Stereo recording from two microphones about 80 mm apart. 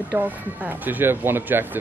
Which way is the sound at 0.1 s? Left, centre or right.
Right.